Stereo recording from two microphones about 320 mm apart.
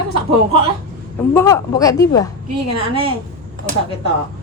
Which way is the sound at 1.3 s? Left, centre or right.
Centre.